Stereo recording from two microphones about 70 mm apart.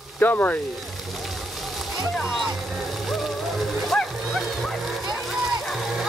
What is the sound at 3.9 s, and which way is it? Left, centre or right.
Music, centre.